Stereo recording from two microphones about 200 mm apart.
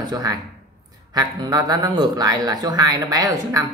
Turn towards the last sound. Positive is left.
turn(degrees=-15)  # may be behind; listen again after turning